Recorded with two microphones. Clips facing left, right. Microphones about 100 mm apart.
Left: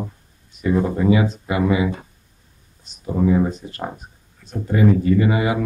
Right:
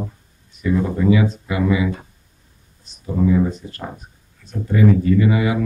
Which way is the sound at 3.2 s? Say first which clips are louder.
Even; 35° left (ahead or behind).